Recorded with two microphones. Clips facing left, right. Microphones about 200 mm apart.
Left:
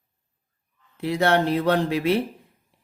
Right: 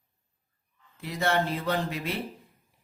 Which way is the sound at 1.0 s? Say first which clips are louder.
Left 7 dB; 70° left (ahead or behind).